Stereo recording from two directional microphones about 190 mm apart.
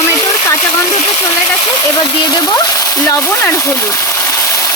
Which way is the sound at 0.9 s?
35° left (ahead or behind).